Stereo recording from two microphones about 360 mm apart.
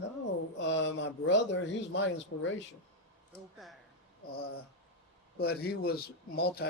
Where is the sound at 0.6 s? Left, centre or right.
Left.